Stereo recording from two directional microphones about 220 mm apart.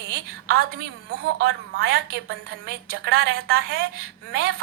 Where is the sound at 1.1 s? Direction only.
45° right (ahead or behind).